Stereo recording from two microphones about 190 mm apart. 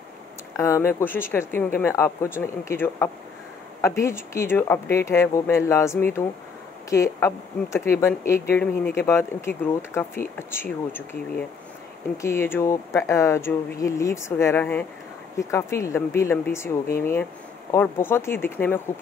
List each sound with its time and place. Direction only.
0.6 s speech: 15° left (ahead or behind)